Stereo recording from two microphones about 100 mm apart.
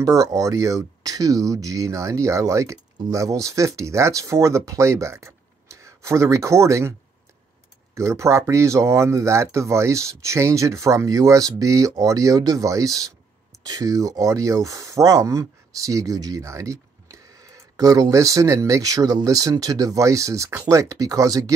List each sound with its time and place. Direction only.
0.0 s speech: 35° right (ahead or behind)
7.9 s speech: 30° right (ahead or behind)